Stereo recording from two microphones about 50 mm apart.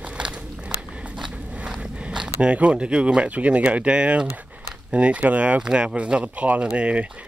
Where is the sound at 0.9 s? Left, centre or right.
Centre.